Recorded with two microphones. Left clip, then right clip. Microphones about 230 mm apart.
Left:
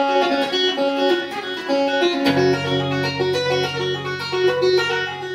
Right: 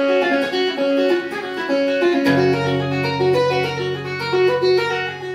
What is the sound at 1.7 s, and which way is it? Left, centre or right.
Music, centre.